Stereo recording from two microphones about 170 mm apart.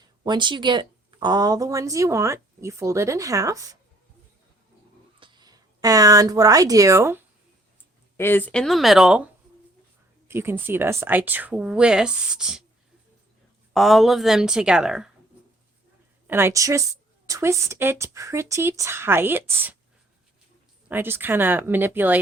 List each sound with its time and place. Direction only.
0.2 s speech: 25° right (ahead or behind)
5.2 s speech: 25° right (ahead or behind)
8.1 s a woman's voice: 15° left (ahead or behind); by 9.2 s 5° right (ahead or behind)
10.2 s a woman's voice: 15° right (ahead or behind)
13.7 s a woman's voice: centre (ahead or behind)
16.2 s a woman's voice: 15° right (ahead or behind)
20.8 s a woman's voice: 10° right (ahead or behind)